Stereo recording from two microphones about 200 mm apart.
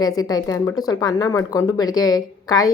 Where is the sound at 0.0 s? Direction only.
20° left (ahead or behind).